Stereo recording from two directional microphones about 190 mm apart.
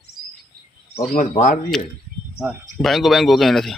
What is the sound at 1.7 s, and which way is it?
Speech, 5° left (ahead or behind).